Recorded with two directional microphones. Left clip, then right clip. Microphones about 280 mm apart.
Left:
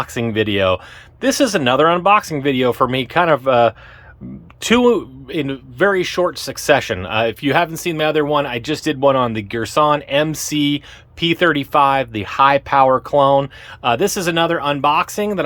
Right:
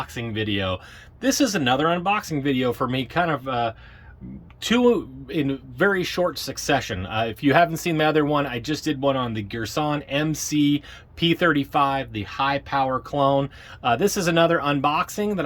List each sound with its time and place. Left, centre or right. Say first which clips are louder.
0.0 s speech: left 9 dB; centre